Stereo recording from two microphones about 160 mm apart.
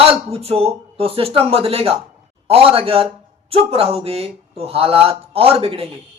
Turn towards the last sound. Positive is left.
turn(degrees=-35)  # may be behind; listen again after turning